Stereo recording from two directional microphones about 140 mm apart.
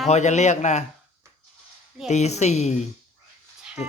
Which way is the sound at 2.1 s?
55° left (ahead or behind).